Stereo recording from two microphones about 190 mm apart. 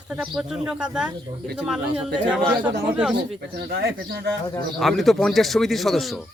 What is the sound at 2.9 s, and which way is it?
Speech, centre (ahead or behind).